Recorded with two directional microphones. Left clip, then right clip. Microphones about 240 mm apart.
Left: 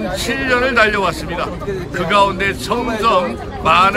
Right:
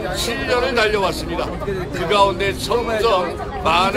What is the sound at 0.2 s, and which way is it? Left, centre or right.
A man's voice, centre.